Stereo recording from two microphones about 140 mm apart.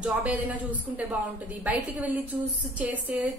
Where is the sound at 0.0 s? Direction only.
10° right (ahead or behind).